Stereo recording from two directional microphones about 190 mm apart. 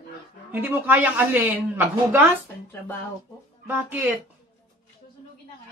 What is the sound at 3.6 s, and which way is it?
Speech, 10° right (ahead or behind).